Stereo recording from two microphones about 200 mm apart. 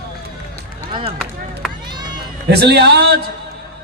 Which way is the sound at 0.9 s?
25° right (ahead or behind).